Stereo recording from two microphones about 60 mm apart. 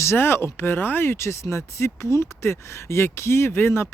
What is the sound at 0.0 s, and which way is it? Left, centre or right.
Speech, left.